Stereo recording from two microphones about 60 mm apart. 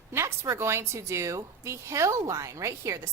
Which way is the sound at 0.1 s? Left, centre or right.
Right.